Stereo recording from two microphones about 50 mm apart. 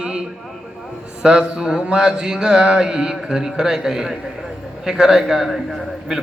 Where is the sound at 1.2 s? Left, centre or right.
Centre.